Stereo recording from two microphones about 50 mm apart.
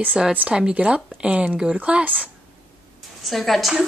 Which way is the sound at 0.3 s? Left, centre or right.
Right.